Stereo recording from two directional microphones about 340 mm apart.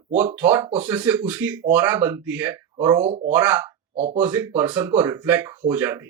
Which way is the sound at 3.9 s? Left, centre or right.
Centre.